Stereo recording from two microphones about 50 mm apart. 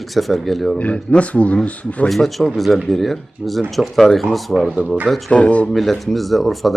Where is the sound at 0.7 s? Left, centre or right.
Left.